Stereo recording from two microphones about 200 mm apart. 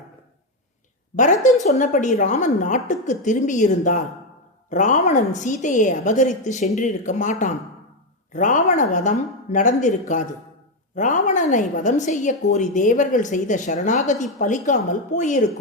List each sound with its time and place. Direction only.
1.1 s a woman's voice: 40° left (ahead or behind)